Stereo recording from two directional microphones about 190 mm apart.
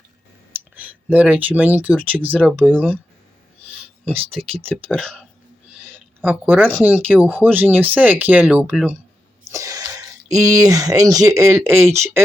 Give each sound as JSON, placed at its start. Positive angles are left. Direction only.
{"t": 0.8, "sound": "speech", "side_deg": -10}
{"t": 4.2, "sound": "speech", "side_deg": -30}
{"t": 4.7, "sound": "speech", "side_deg": 5}
{"t": 5.8, "sound": "a sound", "side_deg": -10}
{"t": 6.8, "sound": "speech", "side_deg": -10}